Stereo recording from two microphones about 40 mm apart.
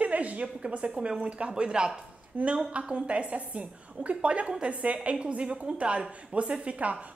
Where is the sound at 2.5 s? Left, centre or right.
Right.